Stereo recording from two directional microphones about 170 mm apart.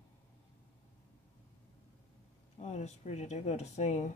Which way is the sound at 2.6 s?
45° left (ahead or behind).